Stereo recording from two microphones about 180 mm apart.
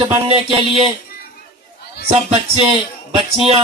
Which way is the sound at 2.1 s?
35° right (ahead or behind).